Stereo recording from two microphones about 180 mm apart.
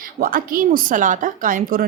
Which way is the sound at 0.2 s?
50° right (ahead or behind).